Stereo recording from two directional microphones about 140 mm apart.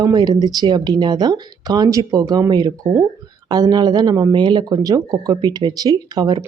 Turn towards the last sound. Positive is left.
turn(degrees=-30)  # may be behind; listen again after turning